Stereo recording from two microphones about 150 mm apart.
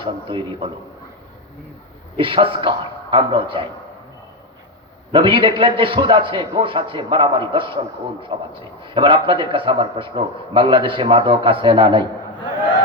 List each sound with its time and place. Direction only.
0.0 s a man's voice: 35° right (ahead or behind)
2.1 s a man's voice: 35° right (ahead or behind)
5.1 s a man's voice: 35° right (ahead or behind)